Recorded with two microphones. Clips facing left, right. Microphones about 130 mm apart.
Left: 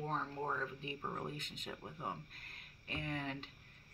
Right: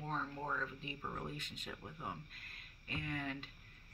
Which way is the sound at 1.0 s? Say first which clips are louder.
Left 1 dB; 25° left (ahead or behind).